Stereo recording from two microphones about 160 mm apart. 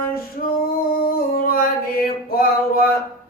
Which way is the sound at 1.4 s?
70° left (ahead or behind).